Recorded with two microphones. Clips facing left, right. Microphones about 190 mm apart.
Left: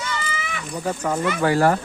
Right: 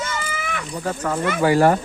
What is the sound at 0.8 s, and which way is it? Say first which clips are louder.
Speech: left 1 dB; 10° left (ahead or behind).